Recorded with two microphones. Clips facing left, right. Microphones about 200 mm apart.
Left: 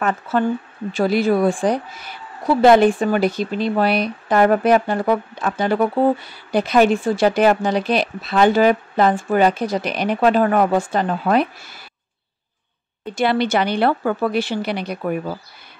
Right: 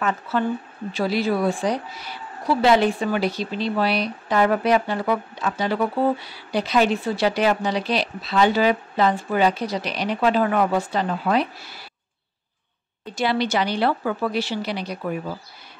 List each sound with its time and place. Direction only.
0.0 s speech: 50° left (ahead or behind)
13.0 s a woman's voice: 55° left (ahead or behind)